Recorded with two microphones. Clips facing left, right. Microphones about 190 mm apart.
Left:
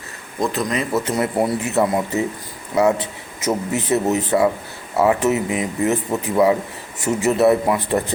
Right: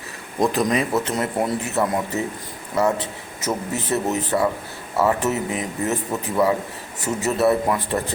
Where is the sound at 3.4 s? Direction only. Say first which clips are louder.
Left 4 dB; 10° left (ahead or behind).